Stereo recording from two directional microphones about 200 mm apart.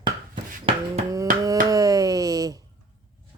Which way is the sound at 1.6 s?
15° right (ahead or behind).